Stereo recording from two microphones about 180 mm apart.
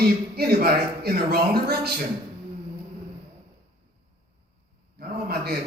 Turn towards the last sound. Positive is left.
turn(degrees=-60)  # may be behind; listen again after turning